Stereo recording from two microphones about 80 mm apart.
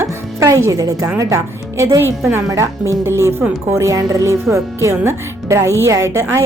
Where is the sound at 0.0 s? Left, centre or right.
Right.